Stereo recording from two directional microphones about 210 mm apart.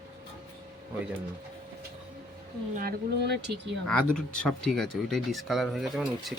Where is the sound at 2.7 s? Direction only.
45° right (ahead or behind).